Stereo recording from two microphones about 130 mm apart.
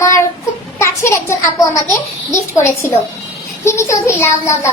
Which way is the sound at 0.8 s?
20° left (ahead or behind).